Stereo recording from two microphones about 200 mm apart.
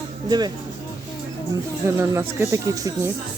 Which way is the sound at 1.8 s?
15° right (ahead or behind).